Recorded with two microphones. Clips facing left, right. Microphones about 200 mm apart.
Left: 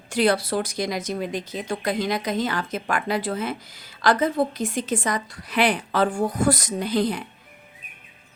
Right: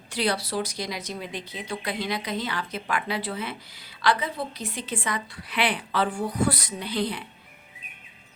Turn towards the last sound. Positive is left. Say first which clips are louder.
# left 6 dB
turn(degrees=45)  # may be behind; listen again after turning